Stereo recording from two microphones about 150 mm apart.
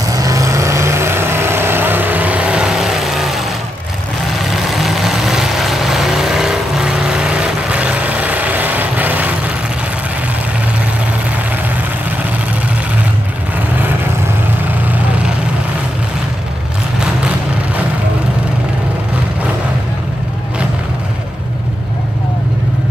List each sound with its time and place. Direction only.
0.1 s vehicle: 25° right (ahead or behind); by 3.4 s centre (ahead or behind)
4.5 s vehicle: centre (ahead or behind)